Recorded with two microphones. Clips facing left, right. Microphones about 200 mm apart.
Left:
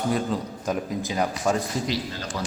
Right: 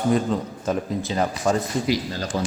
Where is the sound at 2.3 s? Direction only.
30° right (ahead or behind).